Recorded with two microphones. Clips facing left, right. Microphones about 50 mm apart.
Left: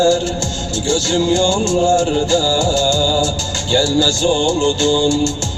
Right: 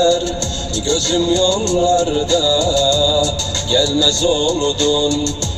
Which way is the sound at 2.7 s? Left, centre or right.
Left.